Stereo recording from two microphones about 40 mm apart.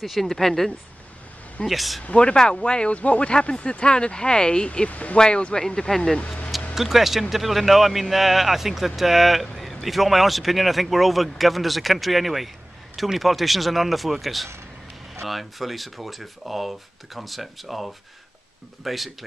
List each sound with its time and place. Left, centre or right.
0.0 s speech: centre
2.1 s speech: left
4.6 s speech: left
5.2 s speech: left
6.7 s speech: centre